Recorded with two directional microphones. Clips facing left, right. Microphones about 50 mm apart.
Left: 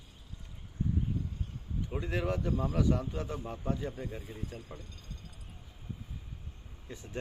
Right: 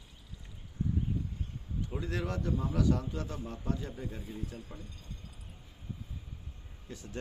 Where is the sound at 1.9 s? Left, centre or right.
Centre.